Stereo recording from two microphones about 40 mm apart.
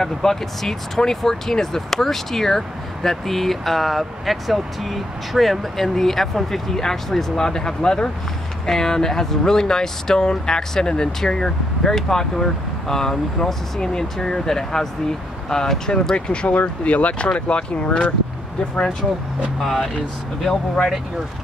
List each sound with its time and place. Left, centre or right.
0.0 s speech: centre
16.3 s speech: left
19.6 s speech: centre